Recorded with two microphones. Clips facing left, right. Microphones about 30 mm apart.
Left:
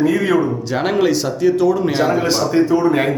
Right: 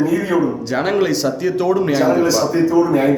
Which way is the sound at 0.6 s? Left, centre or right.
Centre.